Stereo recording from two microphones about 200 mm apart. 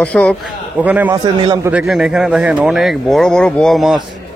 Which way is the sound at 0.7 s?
10° right (ahead or behind).